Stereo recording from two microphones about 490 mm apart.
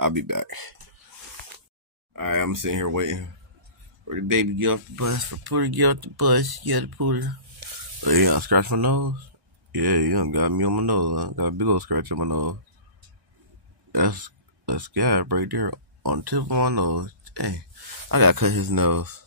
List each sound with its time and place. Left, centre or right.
0.0 s speech: right
2.1 s speech: right
7.6 s sizzle: right
8.0 s speech: right
13.9 s speech: right